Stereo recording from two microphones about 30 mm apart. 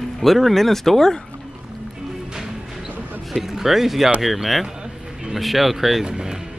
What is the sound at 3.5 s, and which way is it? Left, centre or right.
Speech, centre.